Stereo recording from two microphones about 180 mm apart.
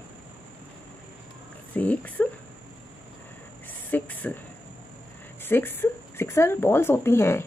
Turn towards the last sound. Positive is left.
turn(degrees=15)  # may be behind; listen again after turning